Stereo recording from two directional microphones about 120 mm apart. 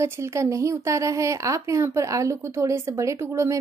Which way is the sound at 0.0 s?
25° right (ahead or behind).